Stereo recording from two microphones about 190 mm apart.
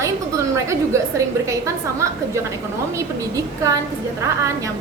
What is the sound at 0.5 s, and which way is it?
A woman's voice, 15° right (ahead or behind).